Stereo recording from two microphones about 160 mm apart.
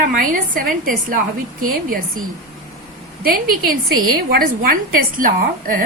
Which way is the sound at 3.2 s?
65° right (ahead or behind).